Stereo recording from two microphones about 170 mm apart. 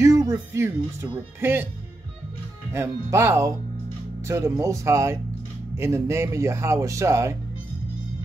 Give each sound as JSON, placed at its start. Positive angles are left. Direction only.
{"t": 0.0, "sound": "speech", "side_deg": -20}
{"t": 2.7, "sound": "speech", "side_deg": -15}